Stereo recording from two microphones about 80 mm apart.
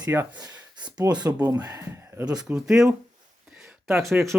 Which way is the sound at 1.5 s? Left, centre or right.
Right.